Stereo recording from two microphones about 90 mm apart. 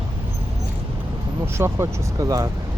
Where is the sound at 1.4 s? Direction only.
30° right (ahead or behind).